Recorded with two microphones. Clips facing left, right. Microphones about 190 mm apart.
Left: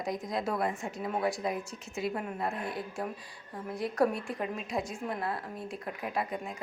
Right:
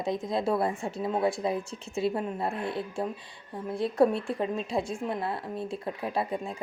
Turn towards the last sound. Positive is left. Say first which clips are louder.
# right 4 dB
turn(degrees=-30)  # may be behind; listen again after turning